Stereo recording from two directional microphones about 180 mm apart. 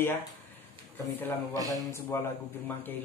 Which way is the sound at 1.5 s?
20° right (ahead or behind).